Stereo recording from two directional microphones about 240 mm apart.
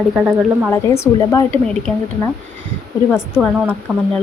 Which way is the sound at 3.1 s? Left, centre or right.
Centre.